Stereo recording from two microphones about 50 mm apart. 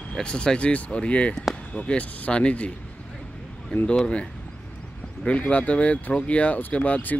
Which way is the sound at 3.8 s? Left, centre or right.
Centre.